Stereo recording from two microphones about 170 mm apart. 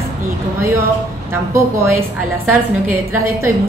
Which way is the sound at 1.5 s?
15° right (ahead or behind).